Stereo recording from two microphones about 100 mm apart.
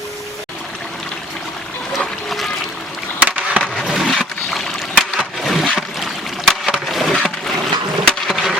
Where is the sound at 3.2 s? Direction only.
15° right (ahead or behind).